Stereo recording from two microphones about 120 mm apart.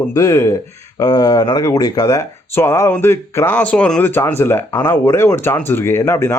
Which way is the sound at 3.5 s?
10° left (ahead or behind).